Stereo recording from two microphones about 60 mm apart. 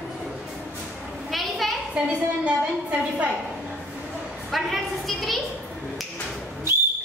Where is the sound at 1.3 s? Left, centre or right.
Centre.